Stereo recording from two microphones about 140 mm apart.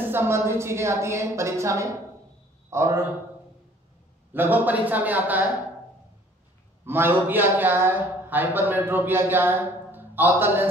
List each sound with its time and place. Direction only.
0.1 s a woman's voice: 15° right (ahead or behind)
4.3 s a man's voice: 15° right (ahead or behind)
6.9 s a man's voice: 15° right (ahead or behind)